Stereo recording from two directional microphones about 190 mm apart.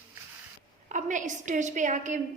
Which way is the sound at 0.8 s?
40° right (ahead or behind).